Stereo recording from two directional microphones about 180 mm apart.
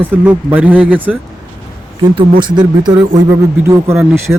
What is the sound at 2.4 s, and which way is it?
Speech, 25° right (ahead or behind).